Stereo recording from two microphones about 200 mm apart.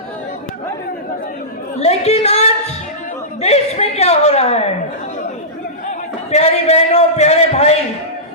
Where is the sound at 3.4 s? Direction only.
30° left (ahead or behind).